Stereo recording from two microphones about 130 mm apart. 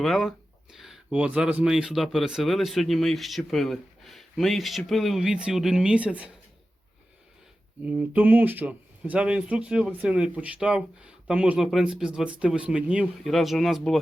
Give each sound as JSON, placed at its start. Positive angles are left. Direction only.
{"t": 0.0, "sound": "speech", "side_deg": 0}
{"t": 7.9, "sound": "speech", "side_deg": -10}